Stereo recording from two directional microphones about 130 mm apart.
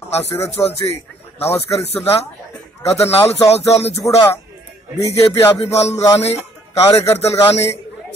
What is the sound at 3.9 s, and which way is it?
Speech, 25° left (ahead or behind).